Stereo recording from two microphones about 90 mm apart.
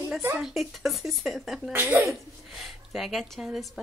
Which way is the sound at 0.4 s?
5° right (ahead or behind).